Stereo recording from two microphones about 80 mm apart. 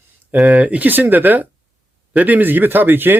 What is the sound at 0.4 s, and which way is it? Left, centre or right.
Speech, centre.